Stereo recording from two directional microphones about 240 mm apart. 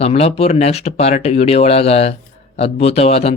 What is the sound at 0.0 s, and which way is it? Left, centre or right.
Speech, left.